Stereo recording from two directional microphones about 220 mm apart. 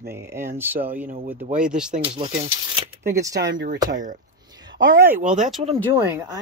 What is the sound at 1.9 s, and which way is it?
Speech, 25° right (ahead or behind).